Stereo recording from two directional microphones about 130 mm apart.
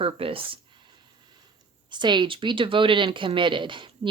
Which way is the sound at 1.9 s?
35° right (ahead or behind).